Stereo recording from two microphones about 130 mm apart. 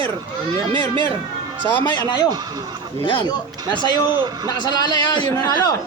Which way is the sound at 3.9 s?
35° right (ahead or behind).